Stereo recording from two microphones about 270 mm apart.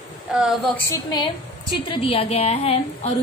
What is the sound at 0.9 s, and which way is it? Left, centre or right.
A woman's voice, centre.